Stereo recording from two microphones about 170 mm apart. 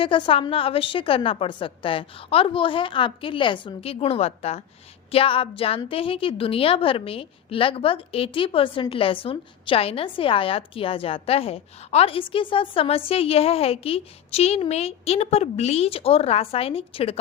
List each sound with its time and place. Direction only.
0.0 s a woman's voice: 30° left (ahead or behind)